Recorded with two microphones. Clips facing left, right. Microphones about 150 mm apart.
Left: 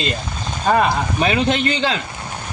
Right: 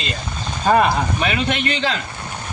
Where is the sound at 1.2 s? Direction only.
30° left (ahead or behind).